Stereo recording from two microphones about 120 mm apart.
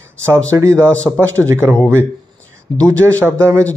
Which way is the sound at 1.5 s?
25° right (ahead or behind).